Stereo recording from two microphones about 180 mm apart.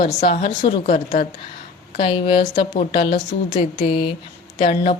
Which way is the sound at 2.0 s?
25° left (ahead or behind).